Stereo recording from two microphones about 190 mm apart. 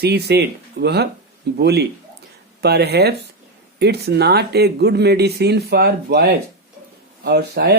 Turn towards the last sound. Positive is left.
turn(degrees=-55)  # may be behind; listen again after turning